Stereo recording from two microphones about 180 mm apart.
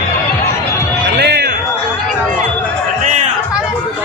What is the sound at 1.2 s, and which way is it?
Music, 65° right (ahead or behind).